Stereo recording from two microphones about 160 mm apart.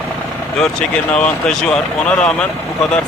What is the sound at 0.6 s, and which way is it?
Speech, 5° left (ahead or behind).